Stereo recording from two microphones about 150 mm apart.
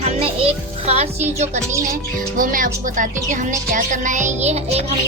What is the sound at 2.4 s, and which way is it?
Speech, 60° right (ahead or behind).